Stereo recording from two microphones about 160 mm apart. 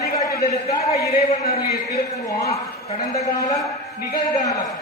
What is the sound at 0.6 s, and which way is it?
Speech, 20° left (ahead or behind).